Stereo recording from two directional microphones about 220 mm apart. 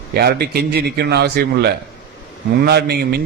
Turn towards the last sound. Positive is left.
turn(degrees=-45)  # may be behind; listen again after turning